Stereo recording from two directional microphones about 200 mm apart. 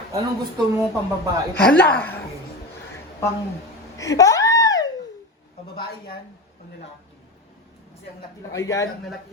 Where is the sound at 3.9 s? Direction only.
15° left (ahead or behind).